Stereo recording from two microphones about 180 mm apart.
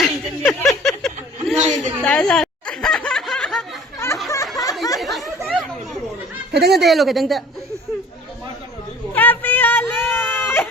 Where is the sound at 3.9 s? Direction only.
15° left (ahead or behind).